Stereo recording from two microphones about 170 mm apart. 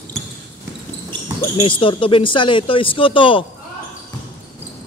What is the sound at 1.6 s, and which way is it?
Speech, 30° left (ahead or behind).